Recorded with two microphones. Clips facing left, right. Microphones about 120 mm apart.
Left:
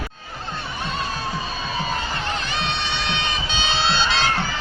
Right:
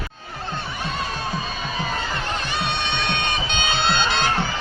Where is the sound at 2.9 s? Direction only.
55° right (ahead or behind).